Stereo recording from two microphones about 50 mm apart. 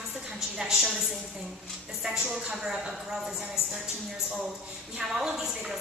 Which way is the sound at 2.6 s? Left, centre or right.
Centre.